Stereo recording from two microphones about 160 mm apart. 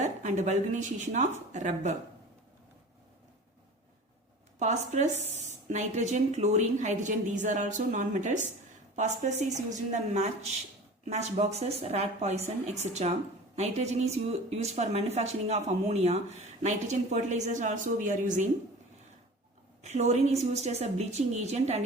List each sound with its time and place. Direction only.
0.0 s speech: 50° right (ahead or behind)
4.6 s speech: 45° right (ahead or behind)
19.8 s speech: 45° right (ahead or behind)